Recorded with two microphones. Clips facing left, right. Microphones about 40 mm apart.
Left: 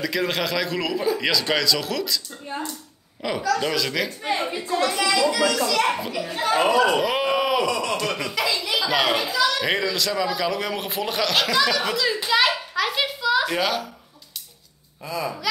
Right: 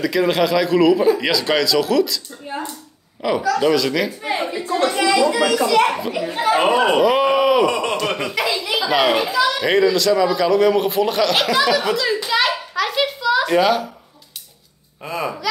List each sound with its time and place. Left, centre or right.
0.0 s speech: centre
2.4 s a sound: centre
3.2 s speech: centre
4.6 s a sound: right
4.9 s speech: right
5.9 s a child's voice: centre
6.1 s speech: right
7.0 s a sound: centre
7.6 s speech: right
8.4 s a child's voice: centre
9.7 s speech: centre
12.3 s a sound: centre
15.0 s speech: right